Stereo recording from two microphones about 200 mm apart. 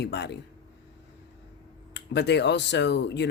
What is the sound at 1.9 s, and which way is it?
Speech, 60° left (ahead or behind).